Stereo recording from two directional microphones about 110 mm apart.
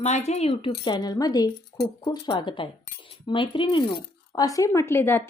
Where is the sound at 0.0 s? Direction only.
90° left; by 1.5 s 35° left (ahead or behind).